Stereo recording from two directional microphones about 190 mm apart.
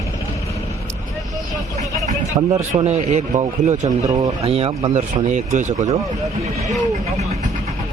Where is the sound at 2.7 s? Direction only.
35° right (ahead or behind).